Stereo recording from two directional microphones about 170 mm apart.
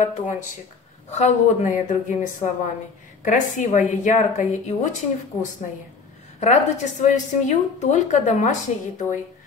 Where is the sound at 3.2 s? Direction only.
50° left (ahead or behind).